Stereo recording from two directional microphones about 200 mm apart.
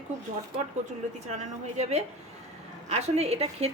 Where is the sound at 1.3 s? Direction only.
35° right (ahead or behind).